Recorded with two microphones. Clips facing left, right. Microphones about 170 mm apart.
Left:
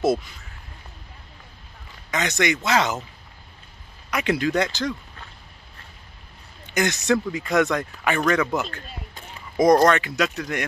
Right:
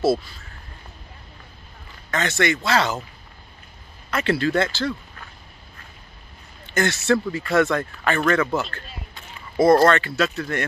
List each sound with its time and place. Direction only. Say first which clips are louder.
0.0 s speech: right 1 dB; 20° left (ahead or behind)
2.0 s speech: right 1 dB; 15° left (ahead or behind)
4.1 s speech: right 1 dB; 15° left (ahead or behind)
6.6 s speech: right 1 dB; 15° left (ahead or behind)